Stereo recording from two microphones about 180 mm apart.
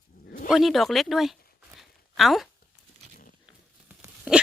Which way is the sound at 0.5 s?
Centre (ahead or behind).